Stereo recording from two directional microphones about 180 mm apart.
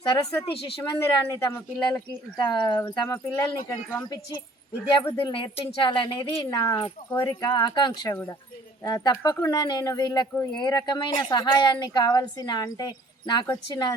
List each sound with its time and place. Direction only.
0.0 s a woman's voice: 25° left (ahead or behind)
1.9 s speech: 5° left (ahead or behind)
2.8 s a woman's voice: 20° left (ahead or behind)
4.0 s a woman's voice: 25° left (ahead or behind)